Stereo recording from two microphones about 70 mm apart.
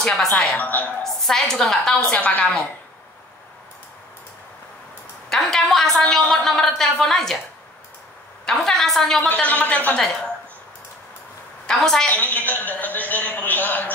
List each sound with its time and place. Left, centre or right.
0.0 s a woman's voice: centre
0.4 s a man's voice: left
1.0 s a woman's voice: centre
2.0 s a man's voice: centre
5.3 s a woman's voice: centre
8.5 s a woman's voice: centre
9.3 s a man's voice: left
9.9 s a woman's voice: centre
11.6 s a woman's voice: centre
12.4 s a man's voice: left